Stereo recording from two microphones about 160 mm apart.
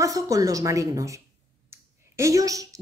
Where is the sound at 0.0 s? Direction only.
20° right (ahead or behind).